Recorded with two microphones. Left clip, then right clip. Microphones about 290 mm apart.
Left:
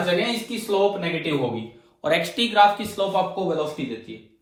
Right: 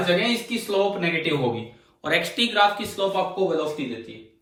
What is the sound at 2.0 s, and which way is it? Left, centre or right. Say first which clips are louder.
Speech: left 1 dB; centre.